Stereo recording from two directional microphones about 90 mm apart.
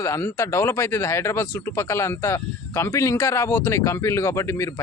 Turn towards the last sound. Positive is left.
turn(degrees=30)  # may be behind; listen again after turning